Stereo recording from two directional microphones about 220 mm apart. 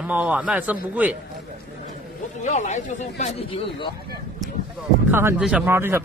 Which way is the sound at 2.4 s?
35° left (ahead or behind).